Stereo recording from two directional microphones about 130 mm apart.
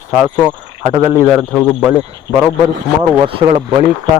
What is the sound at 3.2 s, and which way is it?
Speech, 40° right (ahead or behind).